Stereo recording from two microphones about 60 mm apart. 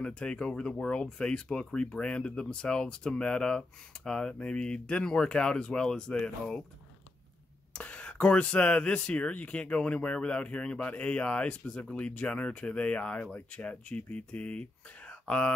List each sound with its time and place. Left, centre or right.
0.0 s speech: centre
7.7 s speech: centre
15.0 s a sound: centre